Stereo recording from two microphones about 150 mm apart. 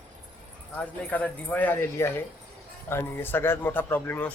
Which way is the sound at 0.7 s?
10° left (ahead or behind).